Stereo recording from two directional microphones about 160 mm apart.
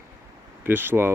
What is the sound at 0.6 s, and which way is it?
Speech, 10° right (ahead or behind).